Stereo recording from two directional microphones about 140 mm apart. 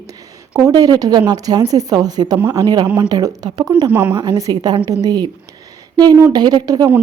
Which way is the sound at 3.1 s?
25° right (ahead or behind).